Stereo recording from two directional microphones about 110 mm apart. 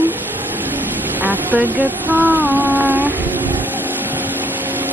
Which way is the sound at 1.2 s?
15° right (ahead or behind).